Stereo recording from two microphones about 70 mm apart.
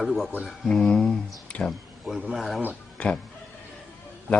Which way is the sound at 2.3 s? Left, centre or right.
Centre.